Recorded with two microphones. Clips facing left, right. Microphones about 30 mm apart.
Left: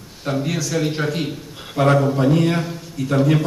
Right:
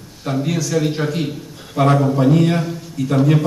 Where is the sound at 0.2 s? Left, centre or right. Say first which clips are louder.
Right 2 dB; centre.